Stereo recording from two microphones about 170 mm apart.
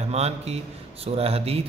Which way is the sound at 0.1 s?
40° right (ahead or behind).